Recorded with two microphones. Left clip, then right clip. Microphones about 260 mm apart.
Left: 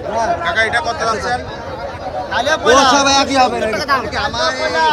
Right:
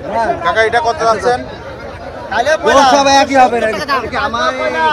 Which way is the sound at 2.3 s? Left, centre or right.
Right.